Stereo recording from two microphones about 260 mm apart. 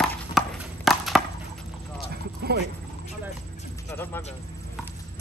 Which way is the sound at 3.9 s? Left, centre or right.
Centre.